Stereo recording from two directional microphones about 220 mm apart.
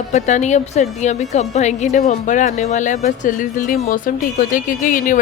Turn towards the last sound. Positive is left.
turn(degrees=35)  # may be behind; listen again after turning